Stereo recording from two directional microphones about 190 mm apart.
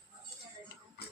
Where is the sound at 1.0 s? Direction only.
60° left (ahead or behind).